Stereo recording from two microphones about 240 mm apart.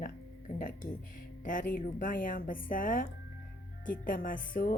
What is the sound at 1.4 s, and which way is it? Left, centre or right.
A woman's voice, left.